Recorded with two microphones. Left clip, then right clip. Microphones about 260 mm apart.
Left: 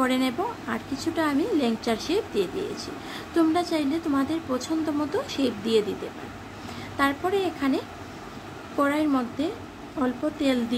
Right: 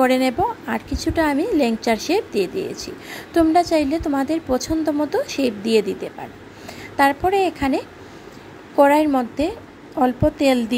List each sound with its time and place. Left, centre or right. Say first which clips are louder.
0.0 s a woman's voice: right 8 dB; right
7.0 s a woman's voice: right 8 dB; right